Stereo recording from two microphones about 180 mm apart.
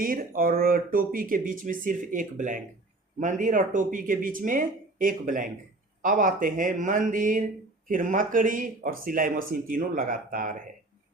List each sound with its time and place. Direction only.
0.0 s speech: 50° right (ahead or behind)